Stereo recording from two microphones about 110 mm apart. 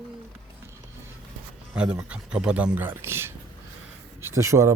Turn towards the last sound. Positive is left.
turn(degrees=-25)  # may be behind; listen again after turning